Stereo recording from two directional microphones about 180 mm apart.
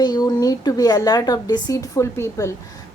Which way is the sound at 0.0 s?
20° left (ahead or behind).